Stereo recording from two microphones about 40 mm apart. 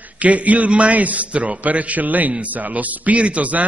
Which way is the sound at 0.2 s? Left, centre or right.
Right.